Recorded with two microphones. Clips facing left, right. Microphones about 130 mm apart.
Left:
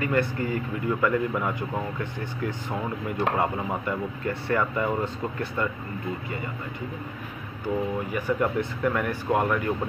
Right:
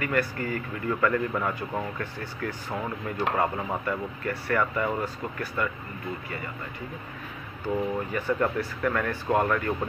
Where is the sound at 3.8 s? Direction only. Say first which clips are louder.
Left 1 dB; 20° left (ahead or behind).